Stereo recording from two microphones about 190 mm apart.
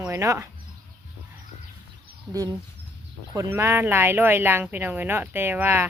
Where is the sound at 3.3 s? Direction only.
15° right (ahead or behind).